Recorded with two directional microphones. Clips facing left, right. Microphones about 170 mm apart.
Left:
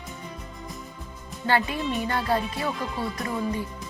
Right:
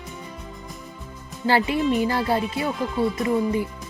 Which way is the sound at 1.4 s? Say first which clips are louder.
Right 5 dB; 25° right (ahead or behind).